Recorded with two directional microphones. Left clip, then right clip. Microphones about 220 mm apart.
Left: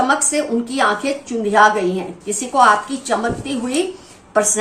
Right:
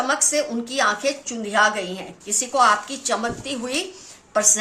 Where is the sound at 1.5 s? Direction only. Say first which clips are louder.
Left 6 dB; 40° right (ahead or behind).